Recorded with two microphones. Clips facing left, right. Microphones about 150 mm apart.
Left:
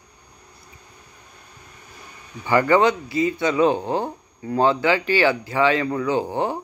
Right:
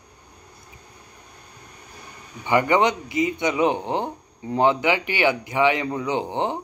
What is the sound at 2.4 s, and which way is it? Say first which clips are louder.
Speech: left 2 dB; 20° right (ahead or behind).